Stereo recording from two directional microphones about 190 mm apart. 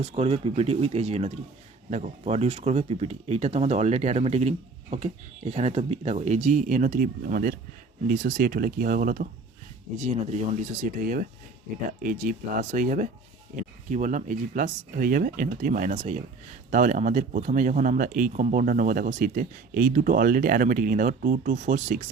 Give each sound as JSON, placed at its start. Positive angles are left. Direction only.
{"t": 0.0, "sound": "speech", "side_deg": -30}
{"t": 10.0, "sound": "speech", "side_deg": -35}